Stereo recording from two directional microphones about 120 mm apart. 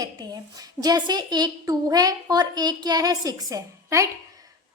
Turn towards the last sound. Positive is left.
turn(degrees=-25)  # may be behind; listen again after turning